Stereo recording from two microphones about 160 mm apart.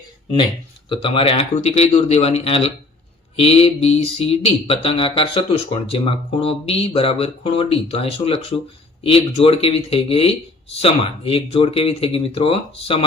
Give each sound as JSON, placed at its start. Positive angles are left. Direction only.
{"t": 0.9, "sound": "speech", "side_deg": 35}